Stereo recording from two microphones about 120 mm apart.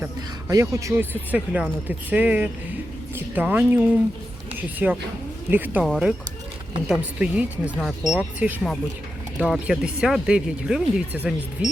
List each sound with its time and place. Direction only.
0.0 s a sound: 25° right (ahead or behind)
1.3 s speech: 10° right (ahead or behind)
5.8 s speech: 5° right (ahead or behind)